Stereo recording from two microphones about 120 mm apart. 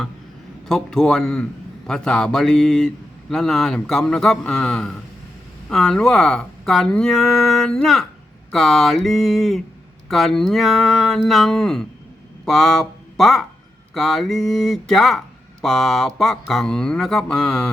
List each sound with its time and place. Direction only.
0.7 s speech: 5° left (ahead or behind)